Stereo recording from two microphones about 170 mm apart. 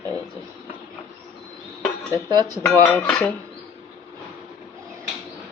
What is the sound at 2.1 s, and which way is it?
Speech, 25° right (ahead or behind).